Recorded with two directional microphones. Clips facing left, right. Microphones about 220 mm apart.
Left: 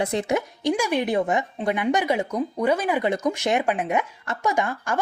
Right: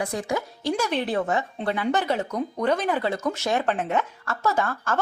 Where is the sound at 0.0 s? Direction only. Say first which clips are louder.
Left 4 dB; 25° left (ahead or behind).